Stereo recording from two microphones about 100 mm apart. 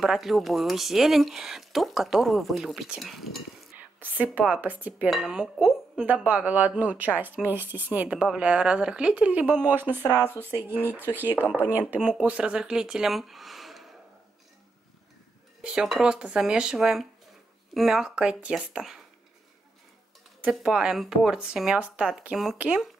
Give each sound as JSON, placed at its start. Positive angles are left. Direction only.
{"t": 0.0, "sound": "speech", "side_deg": -5}
{"t": 4.0, "sound": "speech", "side_deg": -15}
{"t": 15.6, "sound": "speech", "side_deg": -5}
{"t": 20.5, "sound": "speech", "side_deg": -10}